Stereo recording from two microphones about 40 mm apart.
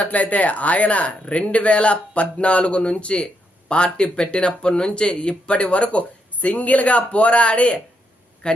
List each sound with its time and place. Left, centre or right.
0.0 s a man's voice: left